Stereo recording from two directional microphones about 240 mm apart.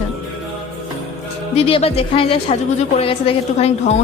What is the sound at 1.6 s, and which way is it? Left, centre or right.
A woman's voice, left.